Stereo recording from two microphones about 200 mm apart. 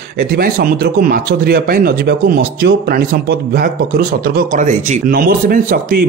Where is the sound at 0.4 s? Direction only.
45° right (ahead or behind).